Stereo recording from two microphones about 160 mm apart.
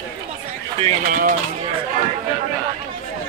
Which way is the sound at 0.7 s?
35° right (ahead or behind).